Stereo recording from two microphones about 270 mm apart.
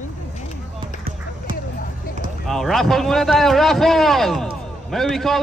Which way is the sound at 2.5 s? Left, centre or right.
Centre.